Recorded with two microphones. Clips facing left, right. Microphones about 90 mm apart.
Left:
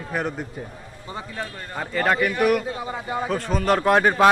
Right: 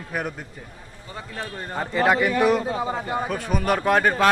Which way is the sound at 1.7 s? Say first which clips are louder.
Right 2 dB; 15° right (ahead or behind).